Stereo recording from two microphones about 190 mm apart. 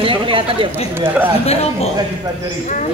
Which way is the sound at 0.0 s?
25° right (ahead or behind).